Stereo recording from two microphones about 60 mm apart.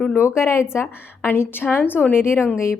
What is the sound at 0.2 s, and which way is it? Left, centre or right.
A woman's voice, left.